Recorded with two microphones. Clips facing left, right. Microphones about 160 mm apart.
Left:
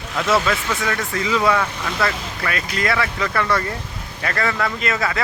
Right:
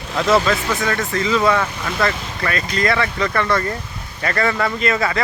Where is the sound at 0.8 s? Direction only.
10° left (ahead or behind).